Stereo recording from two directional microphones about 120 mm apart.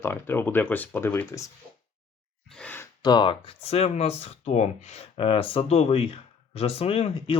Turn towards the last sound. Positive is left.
turn(degrees=55)  # may be behind; listen again after turning